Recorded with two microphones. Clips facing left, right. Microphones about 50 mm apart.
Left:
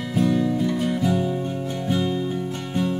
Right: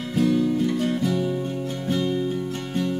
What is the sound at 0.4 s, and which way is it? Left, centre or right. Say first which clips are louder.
Music: even; centre.